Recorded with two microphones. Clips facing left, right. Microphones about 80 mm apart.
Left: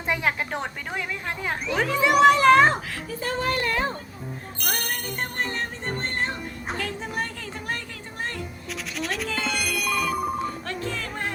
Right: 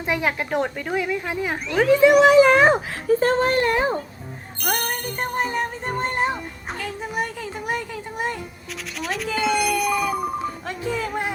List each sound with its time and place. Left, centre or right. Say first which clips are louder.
0.0 s speech: right 2 dB; centre
3.1 s speech: right 10 dB; right
3.5 s speech: right 6 dB; right
4.6 s music: right 5 dB; centre
6.7 s speech: right 4 dB; centre
9.0 s music: right 4 dB; centre